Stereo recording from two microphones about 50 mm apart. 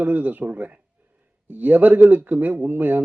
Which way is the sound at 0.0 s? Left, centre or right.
Right.